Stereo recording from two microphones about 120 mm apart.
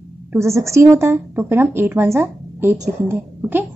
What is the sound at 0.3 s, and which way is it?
A woman's voice, 25° right (ahead or behind).